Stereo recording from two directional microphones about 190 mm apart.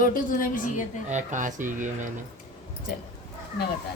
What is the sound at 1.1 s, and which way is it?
Speech, 40° right (ahead or behind).